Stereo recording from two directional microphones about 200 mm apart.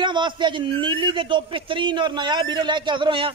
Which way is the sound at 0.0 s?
20° right (ahead or behind).